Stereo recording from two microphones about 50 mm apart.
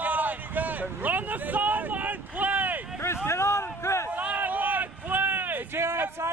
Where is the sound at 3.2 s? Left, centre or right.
Left.